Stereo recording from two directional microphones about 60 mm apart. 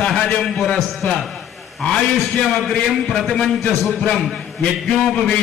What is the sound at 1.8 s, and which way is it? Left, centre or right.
A man's voice, centre.